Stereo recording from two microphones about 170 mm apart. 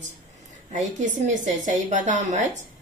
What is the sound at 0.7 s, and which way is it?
A woman's voice, 45° right (ahead or behind).